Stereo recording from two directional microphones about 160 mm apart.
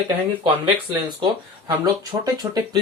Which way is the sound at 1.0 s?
25° right (ahead or behind).